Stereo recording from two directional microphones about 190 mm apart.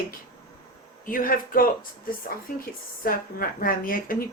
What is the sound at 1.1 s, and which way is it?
Speech, 45° left (ahead or behind).